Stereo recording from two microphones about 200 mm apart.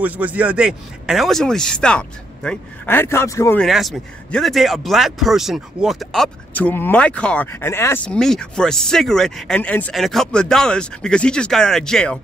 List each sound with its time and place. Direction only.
0.0 s speech: 10° right (ahead or behind); by 3.6 s 15° left (ahead or behind)
3.6 s speech: centre (ahead or behind)